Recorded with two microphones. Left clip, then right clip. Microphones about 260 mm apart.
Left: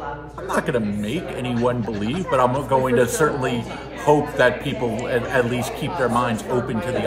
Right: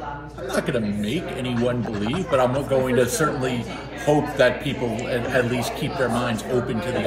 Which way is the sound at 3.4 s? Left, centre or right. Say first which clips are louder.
Left 2 dB; left.